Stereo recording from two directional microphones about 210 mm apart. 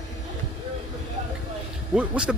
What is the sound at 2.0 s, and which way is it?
Speech, 5° right (ahead or behind).